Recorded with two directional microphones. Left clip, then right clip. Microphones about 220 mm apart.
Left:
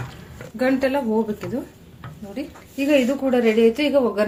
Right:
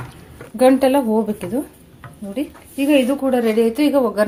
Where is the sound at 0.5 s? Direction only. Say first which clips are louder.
Right 7 dB; 30° right (ahead or behind).